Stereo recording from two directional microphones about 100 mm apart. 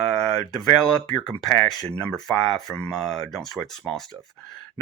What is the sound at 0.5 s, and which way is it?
Speech, 5° left (ahead or behind).